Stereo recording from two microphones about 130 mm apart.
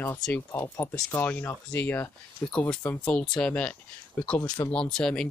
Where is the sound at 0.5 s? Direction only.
25° left (ahead or behind).